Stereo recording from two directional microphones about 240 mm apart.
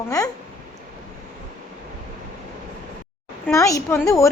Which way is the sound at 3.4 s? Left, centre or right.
Centre.